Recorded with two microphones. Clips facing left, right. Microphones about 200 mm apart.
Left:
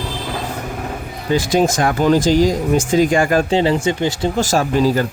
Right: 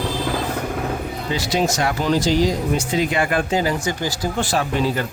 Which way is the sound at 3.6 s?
25° left (ahead or behind).